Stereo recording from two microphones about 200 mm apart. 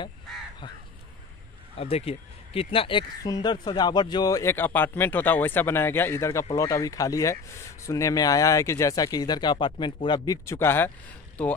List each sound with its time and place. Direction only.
1.8 s speech: 30° left (ahead or behind); by 11.5 s 5° left (ahead or behind)